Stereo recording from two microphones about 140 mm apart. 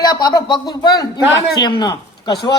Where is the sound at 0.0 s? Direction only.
30° left (ahead or behind).